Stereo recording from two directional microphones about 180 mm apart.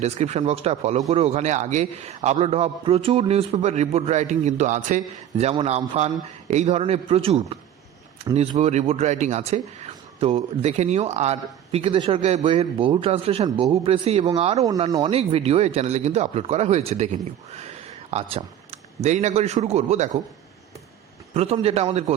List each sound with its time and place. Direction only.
0.0 s speech: 40° right (ahead or behind)
14.8 s speech: 20° right (ahead or behind)
15.1 s speech: 35° right (ahead or behind)
21.3 s speech: 35° right (ahead or behind)